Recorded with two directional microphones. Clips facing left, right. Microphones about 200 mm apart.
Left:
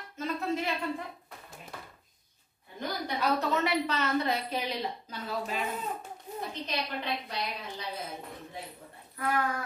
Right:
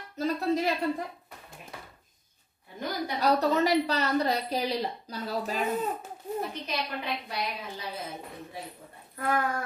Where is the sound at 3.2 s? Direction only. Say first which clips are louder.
Right 5 dB; 35° right (ahead or behind).